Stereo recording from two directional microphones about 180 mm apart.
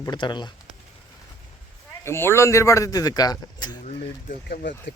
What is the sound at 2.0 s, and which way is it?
Speech, 15° left (ahead or behind).